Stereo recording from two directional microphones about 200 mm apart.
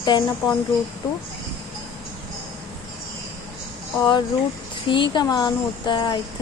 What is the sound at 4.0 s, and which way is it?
Speech, 20° left (ahead or behind).